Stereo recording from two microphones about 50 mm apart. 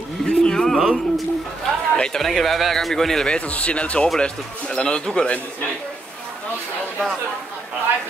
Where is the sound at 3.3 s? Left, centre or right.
Left.